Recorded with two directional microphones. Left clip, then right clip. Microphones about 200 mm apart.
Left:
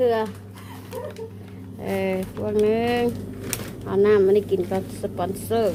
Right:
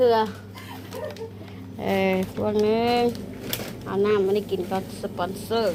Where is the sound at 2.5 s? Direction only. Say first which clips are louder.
Left 1 dB; 15° left (ahead or behind).